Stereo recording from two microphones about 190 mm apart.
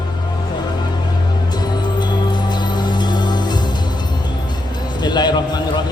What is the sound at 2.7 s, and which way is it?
Music, 25° left (ahead or behind).